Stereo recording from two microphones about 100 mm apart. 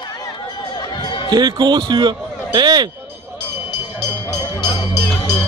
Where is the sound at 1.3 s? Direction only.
45° right (ahead or behind).